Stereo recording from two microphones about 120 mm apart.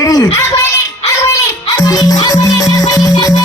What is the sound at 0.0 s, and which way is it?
Music, 30° left (ahead or behind).